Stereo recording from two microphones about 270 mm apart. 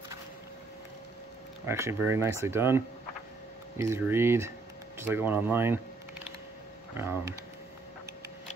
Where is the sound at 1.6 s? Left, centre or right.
Centre.